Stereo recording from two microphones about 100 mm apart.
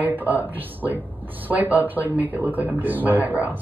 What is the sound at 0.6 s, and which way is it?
Speech, 20° right (ahead or behind).